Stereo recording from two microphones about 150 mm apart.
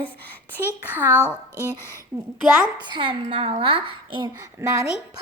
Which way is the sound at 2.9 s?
35° right (ahead or behind).